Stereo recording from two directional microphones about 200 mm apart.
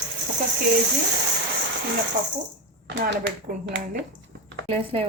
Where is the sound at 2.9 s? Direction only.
65° right (ahead or behind).